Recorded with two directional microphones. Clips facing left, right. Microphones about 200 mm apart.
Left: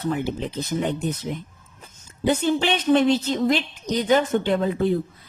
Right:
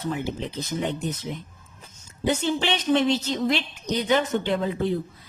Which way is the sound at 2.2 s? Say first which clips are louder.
Left 3 dB; 50° left (ahead or behind).